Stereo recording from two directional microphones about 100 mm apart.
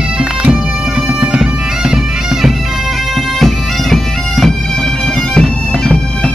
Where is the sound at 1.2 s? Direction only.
10° right (ahead or behind).